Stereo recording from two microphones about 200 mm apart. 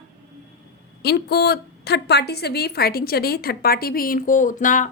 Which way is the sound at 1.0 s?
55° left (ahead or behind).